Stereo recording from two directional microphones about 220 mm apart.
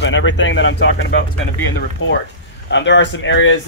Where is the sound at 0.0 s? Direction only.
60° left (ahead or behind).